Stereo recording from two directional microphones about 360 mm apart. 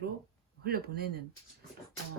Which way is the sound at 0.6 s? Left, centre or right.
Right.